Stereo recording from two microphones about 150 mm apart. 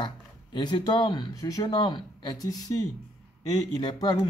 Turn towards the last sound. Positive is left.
turn(degrees=30)  # may be behind; listen again after turning